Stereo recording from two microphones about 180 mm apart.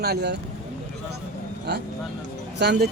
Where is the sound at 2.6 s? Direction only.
65° right (ahead or behind).